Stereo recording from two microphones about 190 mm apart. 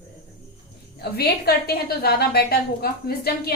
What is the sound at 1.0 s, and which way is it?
A woman's voice, 55° left (ahead or behind).